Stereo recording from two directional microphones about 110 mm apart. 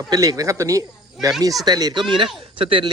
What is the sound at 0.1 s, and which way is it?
Speech, 30° right (ahead or behind).